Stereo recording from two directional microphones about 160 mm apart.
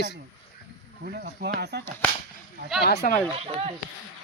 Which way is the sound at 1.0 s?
70° right (ahead or behind).